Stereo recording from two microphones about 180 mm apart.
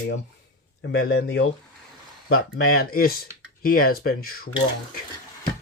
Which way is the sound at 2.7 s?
55° left (ahead or behind).